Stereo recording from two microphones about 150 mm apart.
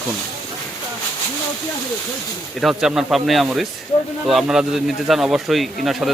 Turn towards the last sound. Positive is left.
turn(degrees=0)  # may be behind; listen again after turning